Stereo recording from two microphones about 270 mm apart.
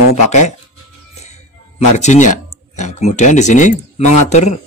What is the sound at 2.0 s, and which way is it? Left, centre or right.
A man's voice, left.